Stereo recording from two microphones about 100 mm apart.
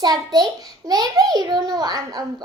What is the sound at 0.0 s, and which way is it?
A child's voice, 45° right (ahead or behind).